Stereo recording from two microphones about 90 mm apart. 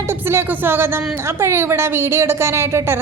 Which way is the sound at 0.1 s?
25° right (ahead or behind).